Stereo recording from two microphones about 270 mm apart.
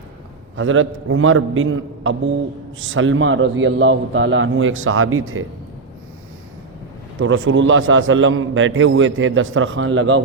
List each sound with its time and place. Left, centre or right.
0.5 s a man's voice: right
7.2 s a man's voice: right